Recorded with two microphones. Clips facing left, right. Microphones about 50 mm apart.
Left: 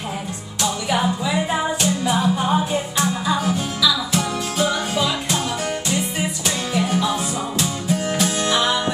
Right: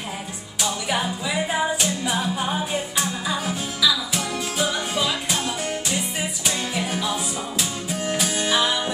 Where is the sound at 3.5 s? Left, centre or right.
Centre.